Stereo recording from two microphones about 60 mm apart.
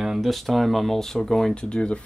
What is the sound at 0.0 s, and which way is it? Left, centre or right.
Speech, centre.